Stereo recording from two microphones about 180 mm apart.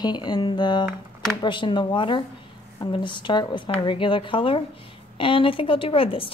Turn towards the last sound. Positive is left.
turn(degrees=30)  # may be behind; listen again after turning